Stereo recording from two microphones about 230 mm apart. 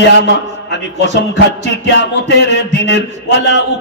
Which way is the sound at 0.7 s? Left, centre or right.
Left.